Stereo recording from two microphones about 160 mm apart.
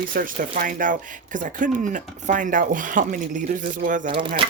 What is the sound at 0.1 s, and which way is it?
Speech, 60° right (ahead or behind).